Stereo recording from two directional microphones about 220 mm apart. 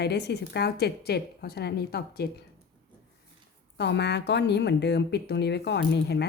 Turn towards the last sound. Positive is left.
turn(degrees=50)  # may be behind; listen again after turning